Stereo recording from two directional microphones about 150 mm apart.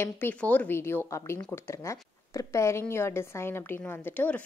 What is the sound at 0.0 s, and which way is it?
A woman's voice, 10° left (ahead or behind).